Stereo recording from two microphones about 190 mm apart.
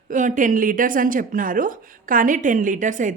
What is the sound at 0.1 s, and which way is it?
A woman's voice, 40° right (ahead or behind).